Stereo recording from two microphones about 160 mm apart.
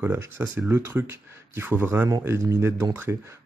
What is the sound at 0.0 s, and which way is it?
Speech, 15° right (ahead or behind).